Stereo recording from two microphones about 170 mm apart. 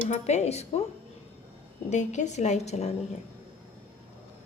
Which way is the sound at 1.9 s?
45° left (ahead or behind).